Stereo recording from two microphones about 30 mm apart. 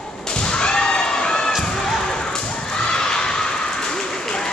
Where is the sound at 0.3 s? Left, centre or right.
Left.